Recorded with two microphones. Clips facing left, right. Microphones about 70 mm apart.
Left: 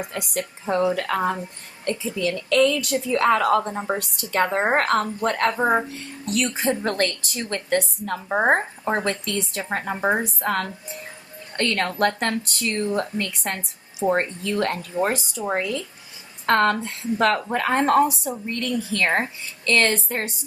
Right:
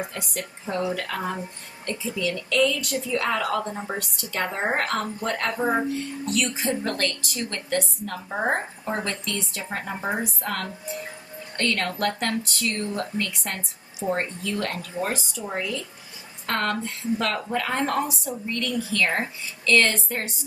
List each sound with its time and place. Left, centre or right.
0.1 s a woman's voice: left
1.9 s a woman's voice: left
5.5 s a woman's voice: left
6.3 s a woman's voice: left